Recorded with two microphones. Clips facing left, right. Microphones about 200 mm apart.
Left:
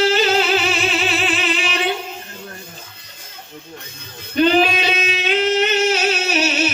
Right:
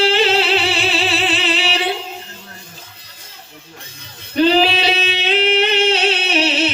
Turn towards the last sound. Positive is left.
turn(degrees=-30)  # may be behind; listen again after turning